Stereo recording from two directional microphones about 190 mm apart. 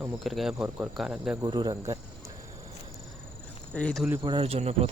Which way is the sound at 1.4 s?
20° right (ahead or behind).